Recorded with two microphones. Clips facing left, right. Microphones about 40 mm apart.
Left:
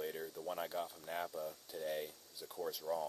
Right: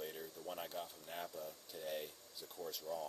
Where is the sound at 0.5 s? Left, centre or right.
Centre.